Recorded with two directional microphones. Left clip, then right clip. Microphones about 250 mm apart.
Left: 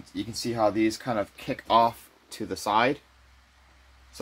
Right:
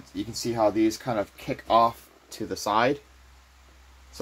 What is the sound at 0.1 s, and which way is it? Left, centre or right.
Speech, centre.